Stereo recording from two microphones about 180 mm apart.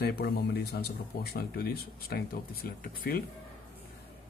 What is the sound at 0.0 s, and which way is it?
Speech, 60° left (ahead or behind).